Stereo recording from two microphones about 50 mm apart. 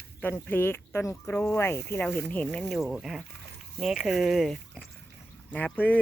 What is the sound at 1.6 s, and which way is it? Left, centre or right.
Speech, left.